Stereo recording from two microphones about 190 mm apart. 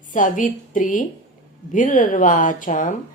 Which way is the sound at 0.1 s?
40° left (ahead or behind).